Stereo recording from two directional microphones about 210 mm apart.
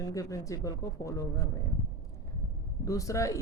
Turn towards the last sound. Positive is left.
turn(degrees=15)  # may be behind; listen again after turning